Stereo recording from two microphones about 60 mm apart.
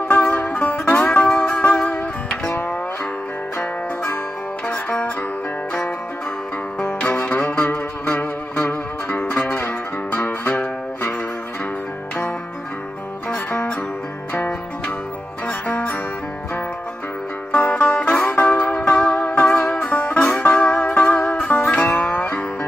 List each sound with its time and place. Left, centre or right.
0.1 s music: left
3.5 s music: left
4.6 s music: left
6.8 s music: left
13.5 s music: left
15.4 s music: left
17.5 s music: left